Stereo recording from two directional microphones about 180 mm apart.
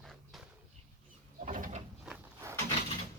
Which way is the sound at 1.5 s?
45° right (ahead or behind).